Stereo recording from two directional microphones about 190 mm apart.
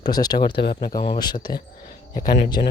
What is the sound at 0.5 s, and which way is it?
Speech, 55° left (ahead or behind).